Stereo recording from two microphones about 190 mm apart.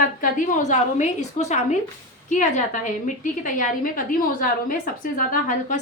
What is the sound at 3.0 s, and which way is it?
A woman's voice, 45° left (ahead or behind).